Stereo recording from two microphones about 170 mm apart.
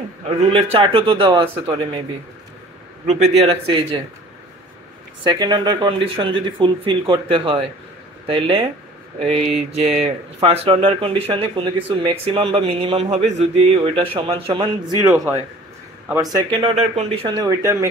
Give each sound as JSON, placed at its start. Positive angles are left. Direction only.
{"t": 0.3, "sound": "speech", "side_deg": -30}
{"t": 3.1, "sound": "speech", "side_deg": -40}
{"t": 5.2, "sound": "a man's voice", "side_deg": -25}
{"t": 16.2, "sound": "a man's voice", "side_deg": -25}
{"t": 17.5, "sound": "speech", "side_deg": -20}